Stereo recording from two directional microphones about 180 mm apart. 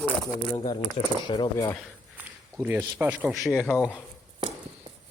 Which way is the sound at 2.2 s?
10° right (ahead or behind).